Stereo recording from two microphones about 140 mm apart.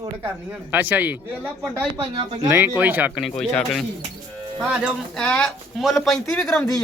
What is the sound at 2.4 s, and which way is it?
Speech, 15° right (ahead or behind).